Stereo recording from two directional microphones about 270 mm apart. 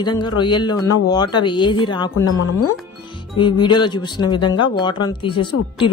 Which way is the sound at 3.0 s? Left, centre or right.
Centre.